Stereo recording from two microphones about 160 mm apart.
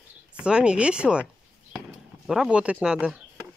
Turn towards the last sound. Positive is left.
turn(degrees=-5)  # may be behind; listen again after turning